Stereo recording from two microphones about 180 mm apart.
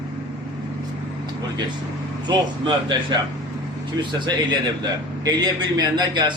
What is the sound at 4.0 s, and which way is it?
A man's voice, 25° right (ahead or behind).